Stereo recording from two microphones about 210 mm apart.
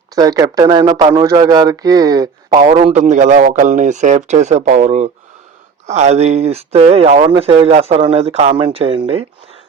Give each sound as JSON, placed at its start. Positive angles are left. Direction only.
{"t": 0.2, "sound": "speech", "side_deg": -15}